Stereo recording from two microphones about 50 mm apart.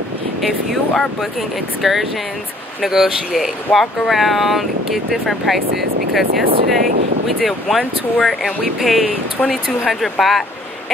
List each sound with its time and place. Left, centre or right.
0.4 s speech: centre
3.7 s speech: left
4.1 s speech: centre